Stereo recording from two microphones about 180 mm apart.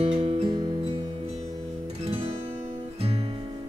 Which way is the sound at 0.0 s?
35° right (ahead or behind).